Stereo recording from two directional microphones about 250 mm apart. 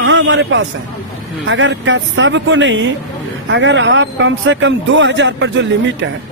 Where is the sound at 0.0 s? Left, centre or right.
Right.